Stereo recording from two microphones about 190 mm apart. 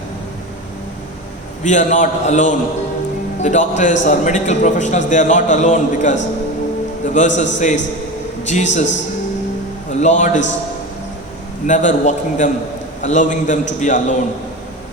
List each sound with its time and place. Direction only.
1.6 s a man's voice: 40° left (ahead or behind)
8.4 s a man's voice: 40° left (ahead or behind)
10.0 s a man's voice: 40° left (ahead or behind)
11.6 s a man's voice: 40° left (ahead or behind)